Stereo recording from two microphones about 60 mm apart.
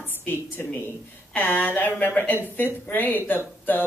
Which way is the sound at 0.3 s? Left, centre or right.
Left.